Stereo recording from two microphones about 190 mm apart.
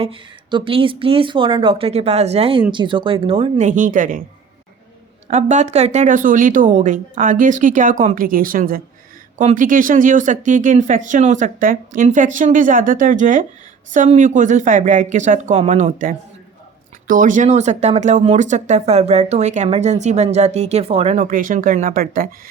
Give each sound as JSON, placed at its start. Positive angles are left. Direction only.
{"t": 0.0, "sound": "speech", "side_deg": -30}
{"t": 5.3, "sound": "speech", "side_deg": -40}